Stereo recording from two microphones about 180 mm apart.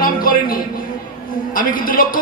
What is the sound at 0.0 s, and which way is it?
Music, 50° left (ahead or behind).